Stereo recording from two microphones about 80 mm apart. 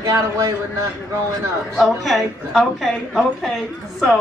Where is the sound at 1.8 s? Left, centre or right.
Centre.